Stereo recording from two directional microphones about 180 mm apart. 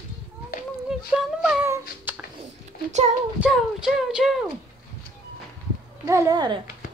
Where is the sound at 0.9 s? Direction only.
5° right (ahead or behind).